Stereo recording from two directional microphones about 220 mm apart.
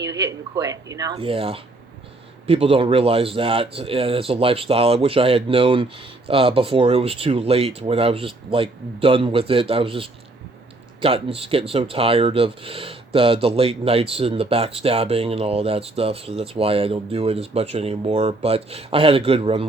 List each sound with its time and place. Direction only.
0.0 s speech: 15° right (ahead or behind)